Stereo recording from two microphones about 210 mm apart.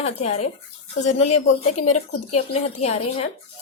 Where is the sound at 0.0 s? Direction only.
30° left (ahead or behind).